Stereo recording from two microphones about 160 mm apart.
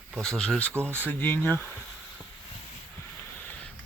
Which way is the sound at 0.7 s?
15° right (ahead or behind).